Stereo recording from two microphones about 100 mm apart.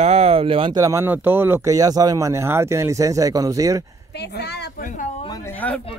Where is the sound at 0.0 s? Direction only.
90° right; by 0.7 s 65° right (ahead or behind).